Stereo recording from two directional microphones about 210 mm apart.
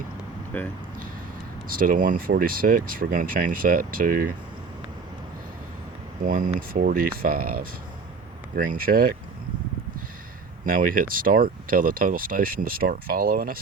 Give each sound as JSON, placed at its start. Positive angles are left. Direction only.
{"t": 0.5, "sound": "speech", "side_deg": 5}
{"t": 1.6, "sound": "speech", "side_deg": -40}
{"t": 6.2, "sound": "speech", "side_deg": -40}
{"t": 10.7, "sound": "speech", "side_deg": -40}